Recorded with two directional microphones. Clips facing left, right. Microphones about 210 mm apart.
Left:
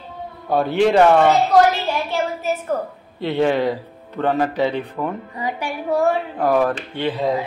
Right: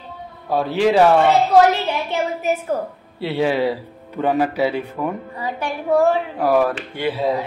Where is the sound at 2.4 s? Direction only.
15° right (ahead or behind).